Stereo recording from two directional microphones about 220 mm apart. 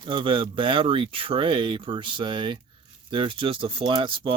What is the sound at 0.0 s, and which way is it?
Speech, 20° right (ahead or behind).